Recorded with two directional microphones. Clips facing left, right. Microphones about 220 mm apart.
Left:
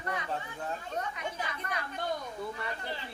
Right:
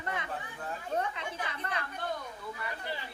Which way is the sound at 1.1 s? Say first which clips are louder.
Left 1 dB; 30° right (ahead or behind).